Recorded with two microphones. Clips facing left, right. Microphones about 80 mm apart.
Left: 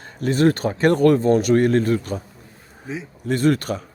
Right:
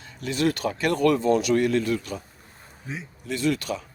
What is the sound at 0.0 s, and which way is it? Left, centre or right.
Speech, left.